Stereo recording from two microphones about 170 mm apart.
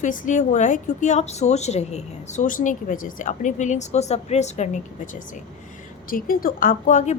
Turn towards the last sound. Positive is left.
turn(degrees=45)  # may be behind; listen again after turning